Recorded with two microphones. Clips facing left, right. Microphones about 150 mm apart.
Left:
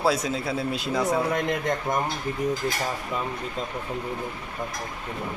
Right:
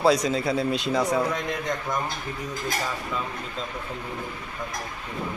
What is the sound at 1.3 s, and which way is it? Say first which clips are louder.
Speech: left 3 dB; 50° left (ahead or behind).